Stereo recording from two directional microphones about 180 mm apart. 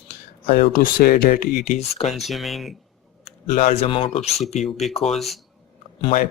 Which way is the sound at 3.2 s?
40° left (ahead or behind).